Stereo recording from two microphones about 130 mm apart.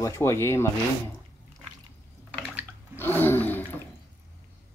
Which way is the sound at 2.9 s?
15° left (ahead or behind).